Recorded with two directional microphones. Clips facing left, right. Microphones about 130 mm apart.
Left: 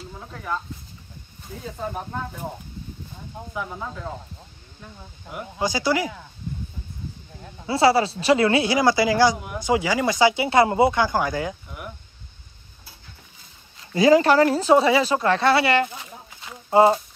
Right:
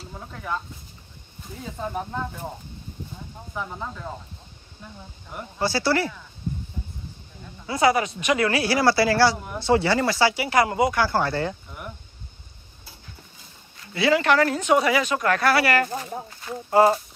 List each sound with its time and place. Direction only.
5.6 s speech: 15° left (ahead or behind)
7.6 s speech: 30° left (ahead or behind); by 11.9 s 10° left (ahead or behind)
13.9 s speech: 40° left (ahead or behind); by 17.0 s 20° left (ahead or behind)